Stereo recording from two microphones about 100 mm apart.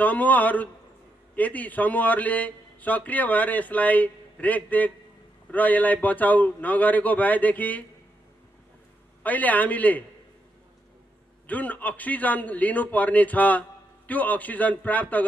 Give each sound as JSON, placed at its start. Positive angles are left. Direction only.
{"t": 0.0, "sound": "a man's voice", "side_deg": 15}
{"t": 9.2, "sound": "a man's voice", "side_deg": 15}
{"t": 11.4, "sound": "a man's voice", "side_deg": 15}